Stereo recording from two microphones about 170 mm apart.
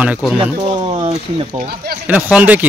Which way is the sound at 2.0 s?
10° right (ahead or behind).